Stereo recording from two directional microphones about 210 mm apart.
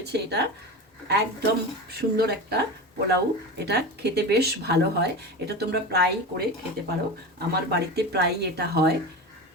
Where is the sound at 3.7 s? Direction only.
50° right (ahead or behind).